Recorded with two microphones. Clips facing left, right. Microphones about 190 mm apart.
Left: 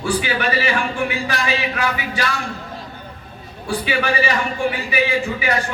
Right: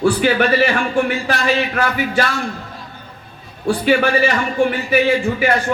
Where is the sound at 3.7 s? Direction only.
50° right (ahead or behind).